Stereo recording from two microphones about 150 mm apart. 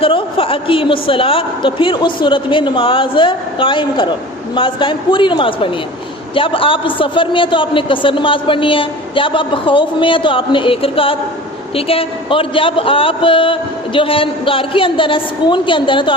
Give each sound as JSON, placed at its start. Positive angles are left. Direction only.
{"t": 0.0, "sound": "a man's voice", "side_deg": 35}